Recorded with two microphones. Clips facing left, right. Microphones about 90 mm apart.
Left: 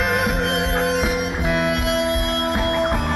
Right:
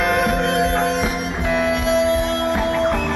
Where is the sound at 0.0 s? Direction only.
5° left (ahead or behind).